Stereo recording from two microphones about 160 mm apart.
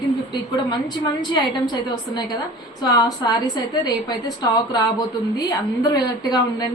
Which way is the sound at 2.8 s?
25° left (ahead or behind).